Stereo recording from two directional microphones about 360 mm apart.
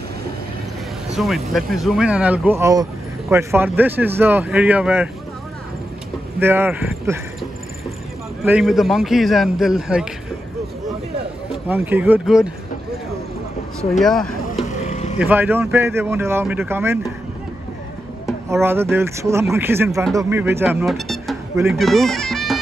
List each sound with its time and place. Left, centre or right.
1.1 s speech: centre
6.4 s speech: centre
8.5 s speech: centre
11.6 s speech: centre
13.9 s speech: centre
14.6 s vehicle: centre
15.1 s speech: centre
18.5 s speech: centre